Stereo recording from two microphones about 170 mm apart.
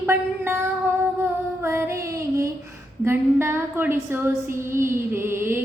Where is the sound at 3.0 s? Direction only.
15° right (ahead or behind).